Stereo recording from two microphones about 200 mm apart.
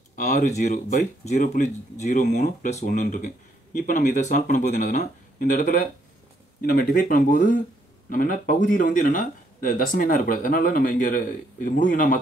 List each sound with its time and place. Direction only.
0.1 s speech: 40° left (ahead or behind)